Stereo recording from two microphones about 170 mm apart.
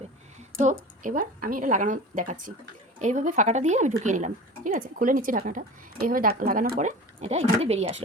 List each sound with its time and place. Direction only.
0.6 s speech: 50° right (ahead or behind)